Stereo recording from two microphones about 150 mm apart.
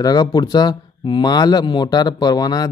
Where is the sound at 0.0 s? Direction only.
25° left (ahead or behind).